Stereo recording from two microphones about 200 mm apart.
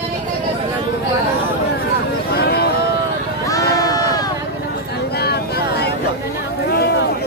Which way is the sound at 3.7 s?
20° left (ahead or behind).